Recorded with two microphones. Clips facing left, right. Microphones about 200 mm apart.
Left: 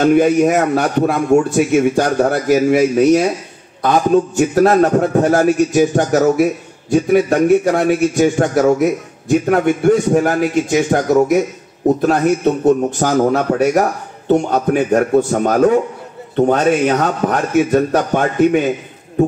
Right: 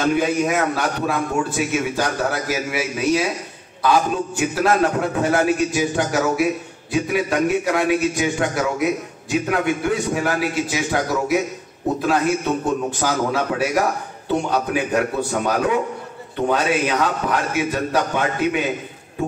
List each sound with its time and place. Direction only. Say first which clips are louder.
0.0 s a man's voice: left 8 dB; 45° left (ahead or behind)
12.6 s a man's voice: left 8 dB; 45° left (ahead or behind)